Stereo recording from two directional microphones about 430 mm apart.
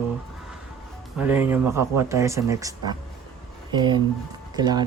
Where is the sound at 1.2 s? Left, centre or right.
Centre.